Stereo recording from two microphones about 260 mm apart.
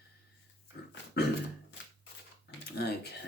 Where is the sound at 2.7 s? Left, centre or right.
Left.